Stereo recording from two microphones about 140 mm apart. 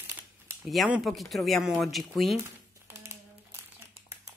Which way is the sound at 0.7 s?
5° right (ahead or behind).